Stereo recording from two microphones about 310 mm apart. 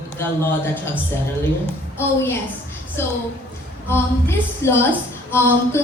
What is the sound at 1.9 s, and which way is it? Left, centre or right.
A woman's voice, centre.